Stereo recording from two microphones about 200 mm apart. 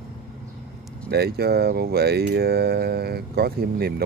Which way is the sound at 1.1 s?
55° right (ahead or behind).